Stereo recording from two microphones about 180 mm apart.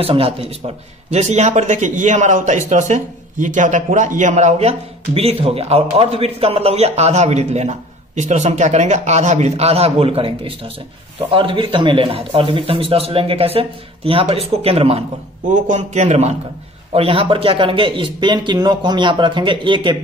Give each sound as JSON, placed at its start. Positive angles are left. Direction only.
{"t": 0.0, "sound": "speech", "side_deg": -30}